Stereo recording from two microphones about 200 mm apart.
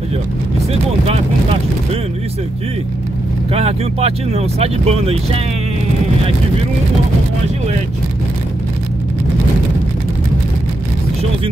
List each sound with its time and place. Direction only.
1.0 s speech: 30° right (ahead or behind)
3.5 s speech: 30° right (ahead or behind)